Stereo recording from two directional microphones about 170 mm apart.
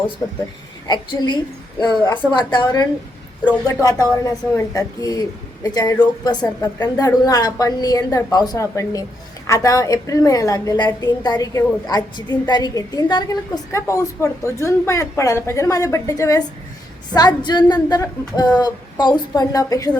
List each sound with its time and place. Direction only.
0.9 s a woman's voice: 25° left (ahead or behind)